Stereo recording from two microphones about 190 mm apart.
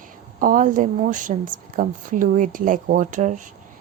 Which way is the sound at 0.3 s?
45° right (ahead or behind).